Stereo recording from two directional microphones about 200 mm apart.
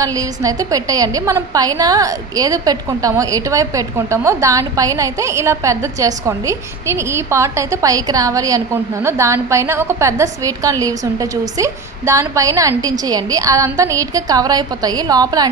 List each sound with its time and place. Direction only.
0.0 s a woman's voice: 15° right (ahead or behind)